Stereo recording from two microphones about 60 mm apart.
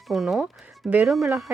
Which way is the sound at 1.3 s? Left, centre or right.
Right.